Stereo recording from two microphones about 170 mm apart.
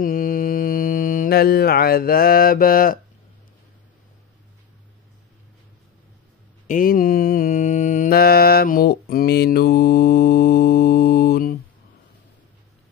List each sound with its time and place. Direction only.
0.0 s mantra: 55° left (ahead or behind)
6.7 s mantra: 55° left (ahead or behind)